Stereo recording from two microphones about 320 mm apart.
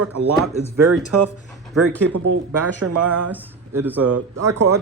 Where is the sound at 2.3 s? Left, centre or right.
Right.